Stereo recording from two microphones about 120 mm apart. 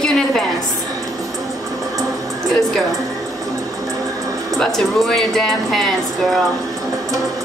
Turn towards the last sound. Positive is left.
turn(degrees=0)  # may be behind; listen again after turning